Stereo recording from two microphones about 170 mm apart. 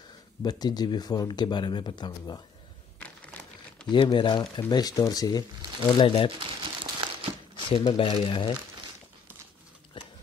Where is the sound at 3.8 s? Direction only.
25° left (ahead or behind).